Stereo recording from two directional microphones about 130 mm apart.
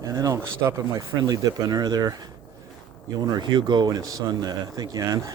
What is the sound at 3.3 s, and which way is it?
Speech, 35° right (ahead or behind).